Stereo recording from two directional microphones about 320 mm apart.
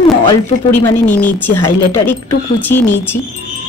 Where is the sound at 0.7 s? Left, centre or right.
Centre.